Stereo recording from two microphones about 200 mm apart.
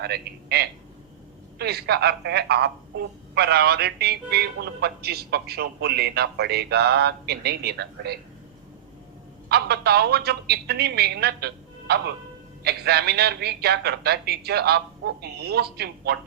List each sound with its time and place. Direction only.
0.0 s a man's voice: 55° right (ahead or behind)
9.5 s a man's voice: 55° right (ahead or behind)